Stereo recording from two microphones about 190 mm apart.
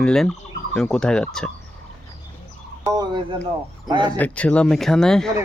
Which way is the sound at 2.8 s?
20° right (ahead or behind).